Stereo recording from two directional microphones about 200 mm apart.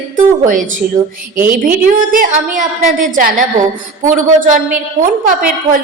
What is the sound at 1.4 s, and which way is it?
A woman's voice, 45° right (ahead or behind).